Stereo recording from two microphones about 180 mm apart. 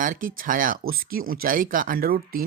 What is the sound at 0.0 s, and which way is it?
Speech, 50° right (ahead or behind).